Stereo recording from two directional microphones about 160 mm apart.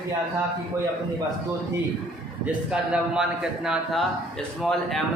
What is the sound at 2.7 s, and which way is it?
A man's voice, 5° right (ahead or behind).